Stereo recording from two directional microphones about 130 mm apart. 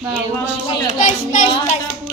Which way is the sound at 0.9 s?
75° left (ahead or behind).